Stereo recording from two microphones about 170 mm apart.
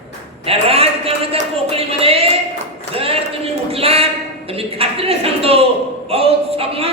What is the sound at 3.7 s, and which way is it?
A man's voice, 35° right (ahead or behind).